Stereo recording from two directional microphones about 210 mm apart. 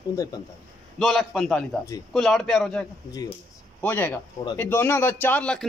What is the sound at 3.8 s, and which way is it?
A man's voice, 10° left (ahead or behind).